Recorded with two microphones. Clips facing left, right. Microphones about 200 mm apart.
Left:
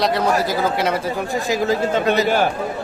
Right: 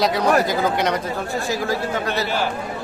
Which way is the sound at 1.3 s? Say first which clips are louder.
Left 4 dB; 20° left (ahead or behind).